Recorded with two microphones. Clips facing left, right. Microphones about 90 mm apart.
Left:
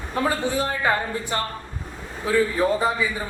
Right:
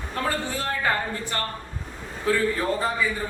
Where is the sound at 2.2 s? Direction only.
15° left (ahead or behind).